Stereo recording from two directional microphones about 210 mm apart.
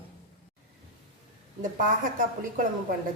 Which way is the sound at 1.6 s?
40° right (ahead or behind).